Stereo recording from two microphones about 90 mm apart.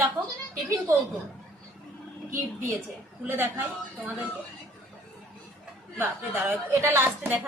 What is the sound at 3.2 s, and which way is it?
Speech, 25° right (ahead or behind).